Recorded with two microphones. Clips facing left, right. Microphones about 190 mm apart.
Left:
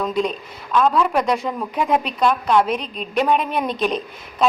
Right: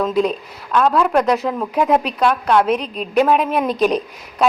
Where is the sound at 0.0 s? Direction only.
5° right (ahead or behind).